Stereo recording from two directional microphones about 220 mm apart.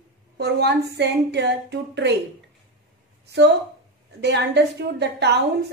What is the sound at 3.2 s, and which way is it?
A woman's voice, 50° right (ahead or behind).